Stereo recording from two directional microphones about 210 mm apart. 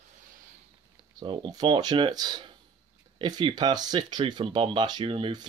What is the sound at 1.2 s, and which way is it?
Speech, 25° right (ahead or behind).